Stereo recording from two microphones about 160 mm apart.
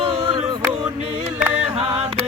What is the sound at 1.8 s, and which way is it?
Chant, 40° right (ahead or behind).